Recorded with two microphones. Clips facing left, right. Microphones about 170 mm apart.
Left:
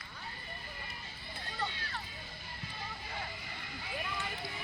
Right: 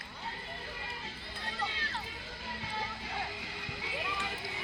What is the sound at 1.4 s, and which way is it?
Run, 90° right.